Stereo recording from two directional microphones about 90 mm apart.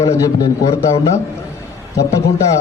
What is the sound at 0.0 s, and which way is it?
Speech, 40° left (ahead or behind).